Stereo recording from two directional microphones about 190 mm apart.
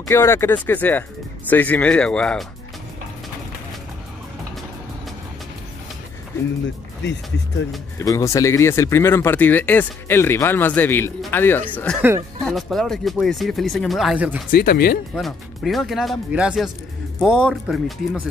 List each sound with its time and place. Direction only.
0.1 s speech: 15° left (ahead or behind)
8.0 s speech: 15° left (ahead or behind); by 14.4 s 5° right (ahead or behind)
14.5 s speech: 50° left (ahead or behind)
15.1 s speech: centre (ahead or behind)